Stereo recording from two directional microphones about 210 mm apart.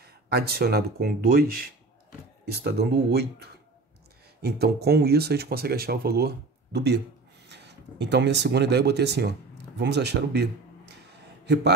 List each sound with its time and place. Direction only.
0.0 s speech: 50° right (ahead or behind)